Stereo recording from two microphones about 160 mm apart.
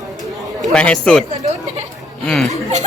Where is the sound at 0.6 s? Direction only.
5° left (ahead or behind).